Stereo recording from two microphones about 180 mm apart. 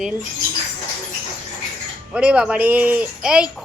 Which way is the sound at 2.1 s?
5° right (ahead or behind).